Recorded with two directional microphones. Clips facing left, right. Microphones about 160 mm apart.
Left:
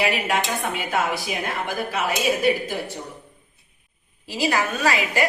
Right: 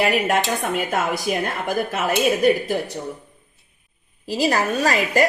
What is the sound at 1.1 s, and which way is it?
A woman's voice, 45° right (ahead or behind).